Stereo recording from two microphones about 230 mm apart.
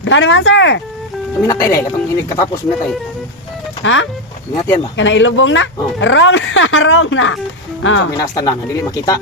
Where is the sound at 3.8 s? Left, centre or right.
Left.